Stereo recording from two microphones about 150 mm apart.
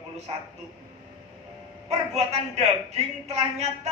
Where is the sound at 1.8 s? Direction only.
45° right (ahead or behind).